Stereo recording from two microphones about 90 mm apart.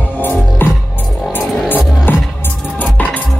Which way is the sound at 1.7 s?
20° left (ahead or behind).